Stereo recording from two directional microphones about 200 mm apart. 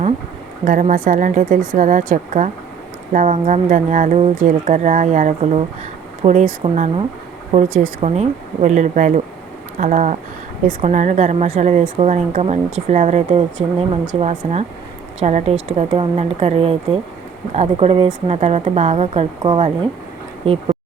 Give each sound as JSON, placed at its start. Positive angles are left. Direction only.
{"t": 0.6, "sound": "speech", "side_deg": -40}
{"t": 8.0, "sound": "speech", "side_deg": -35}